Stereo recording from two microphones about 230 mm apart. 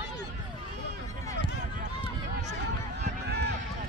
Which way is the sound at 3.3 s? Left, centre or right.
Right.